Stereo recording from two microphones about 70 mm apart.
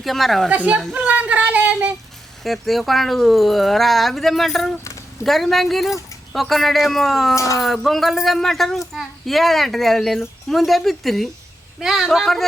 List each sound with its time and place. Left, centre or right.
0.0 s speech: centre
0.5 s a woman's voice: right
0.9 s a sound: right
2.4 s speech: centre
4.8 s a sound: left
5.2 s speech: centre
7.3 s speech: left
7.6 s speech: centre